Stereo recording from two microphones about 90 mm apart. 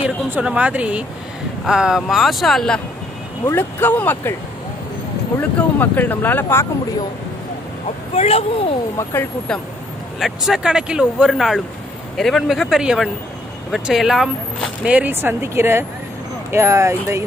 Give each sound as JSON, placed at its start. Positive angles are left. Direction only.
{"t": 0.0, "sound": "speech", "side_deg": -15}
{"t": 3.5, "sound": "speech", "side_deg": 20}
{"t": 5.8, "sound": "speech", "side_deg": 20}
{"t": 8.1, "sound": "speech", "side_deg": 90}
{"t": 8.9, "sound": "speech", "side_deg": 25}
{"t": 10.1, "sound": "speech", "side_deg": 0}
{"t": 14.9, "sound": "speech", "side_deg": -20}